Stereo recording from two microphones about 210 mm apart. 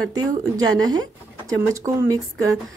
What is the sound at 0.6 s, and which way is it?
A woman's voice, 20° right (ahead or behind).